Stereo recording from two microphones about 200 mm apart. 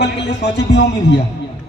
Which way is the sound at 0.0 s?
60° left (ahead or behind).